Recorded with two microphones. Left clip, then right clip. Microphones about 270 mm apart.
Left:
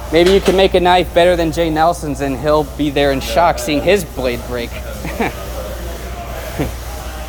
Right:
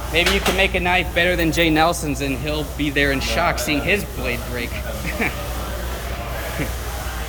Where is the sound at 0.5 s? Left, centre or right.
Left.